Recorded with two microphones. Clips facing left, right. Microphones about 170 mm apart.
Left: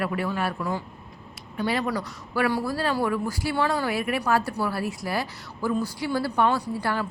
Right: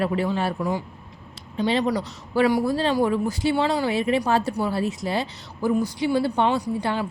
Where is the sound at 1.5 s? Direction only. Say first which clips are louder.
Right 4 dB; 25° right (ahead or behind).